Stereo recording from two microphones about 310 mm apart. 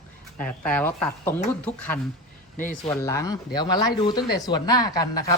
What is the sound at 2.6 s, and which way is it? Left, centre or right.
Speech, left.